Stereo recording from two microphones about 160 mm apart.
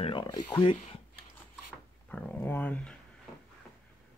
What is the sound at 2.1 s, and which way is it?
Speech, 10° left (ahead or behind).